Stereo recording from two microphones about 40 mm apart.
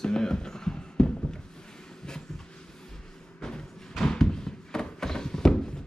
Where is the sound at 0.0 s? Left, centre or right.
Centre.